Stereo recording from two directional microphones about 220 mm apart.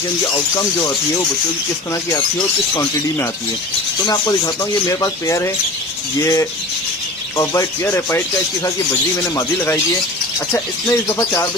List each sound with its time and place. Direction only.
4.0 s speech: 20° left (ahead or behind)
9.2 s speech: 15° left (ahead or behind)
11.2 s speech: 15° left (ahead or behind)